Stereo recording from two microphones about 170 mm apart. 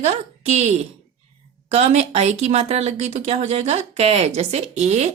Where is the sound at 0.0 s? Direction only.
40° right (ahead or behind).